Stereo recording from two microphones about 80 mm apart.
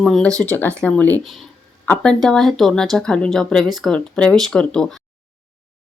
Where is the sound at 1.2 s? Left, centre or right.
Centre.